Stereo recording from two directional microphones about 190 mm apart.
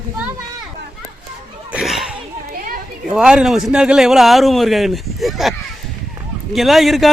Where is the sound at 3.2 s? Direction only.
5° right (ahead or behind).